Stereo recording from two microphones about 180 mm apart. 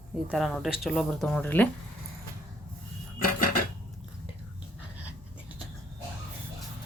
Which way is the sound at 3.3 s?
55° left (ahead or behind).